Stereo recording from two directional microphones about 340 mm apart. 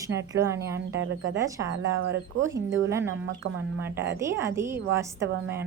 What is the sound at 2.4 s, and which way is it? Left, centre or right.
Speech, centre.